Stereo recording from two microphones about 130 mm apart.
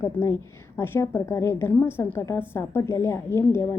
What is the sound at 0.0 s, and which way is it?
A woman's voice, 20° left (ahead or behind).